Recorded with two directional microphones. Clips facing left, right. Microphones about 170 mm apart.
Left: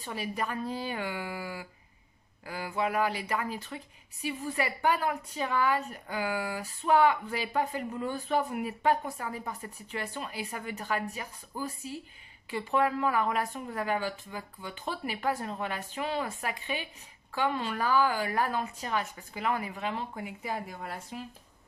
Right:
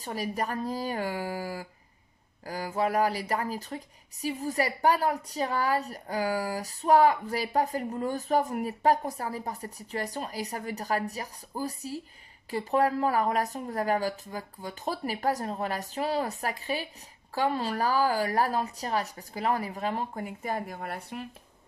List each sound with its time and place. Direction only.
0.0 s speech: 40° right (ahead or behind); by 21.3 s 60° right (ahead or behind)